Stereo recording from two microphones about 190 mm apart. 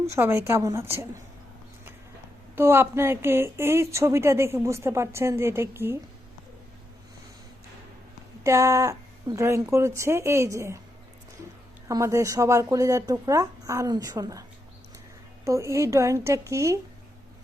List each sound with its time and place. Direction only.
0.1 s a woman's voice: 15° right (ahead or behind)
2.6 s a woman's voice: 15° right (ahead or behind)
8.4 s a woman's voice: 15° right (ahead or behind)
11.9 s a woman's voice: 15° right (ahead or behind)
15.4 s a woman's voice: 15° right (ahead or behind)